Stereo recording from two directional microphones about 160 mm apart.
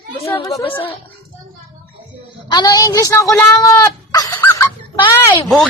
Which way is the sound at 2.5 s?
25° left (ahead or behind).